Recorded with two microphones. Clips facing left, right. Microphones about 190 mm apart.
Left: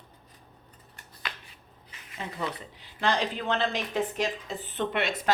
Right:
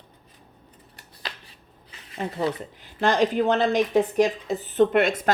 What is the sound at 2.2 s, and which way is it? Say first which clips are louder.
Speech: right 8 dB; 50° right (ahead or behind).